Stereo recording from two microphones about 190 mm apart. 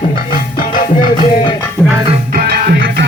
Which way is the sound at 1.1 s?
25° left (ahead or behind).